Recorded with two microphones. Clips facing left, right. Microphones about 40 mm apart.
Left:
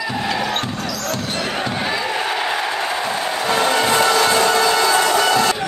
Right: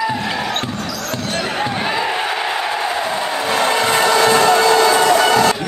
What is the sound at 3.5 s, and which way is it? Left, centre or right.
Music, centre.